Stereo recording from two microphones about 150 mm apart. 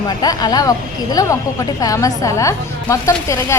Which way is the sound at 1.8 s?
25° left (ahead or behind).